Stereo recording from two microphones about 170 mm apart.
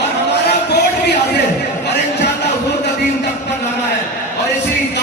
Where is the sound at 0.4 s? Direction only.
80° left.